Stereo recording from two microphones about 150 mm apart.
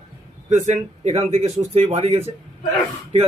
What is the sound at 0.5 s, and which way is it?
A man's voice, 55° right (ahead or behind).